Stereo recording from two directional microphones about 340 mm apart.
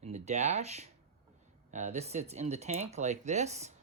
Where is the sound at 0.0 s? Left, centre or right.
Centre.